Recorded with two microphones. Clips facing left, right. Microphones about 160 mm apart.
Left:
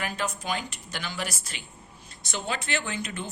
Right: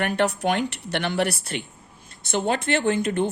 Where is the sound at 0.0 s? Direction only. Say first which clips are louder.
Right 10 dB; 65° right (ahead or behind).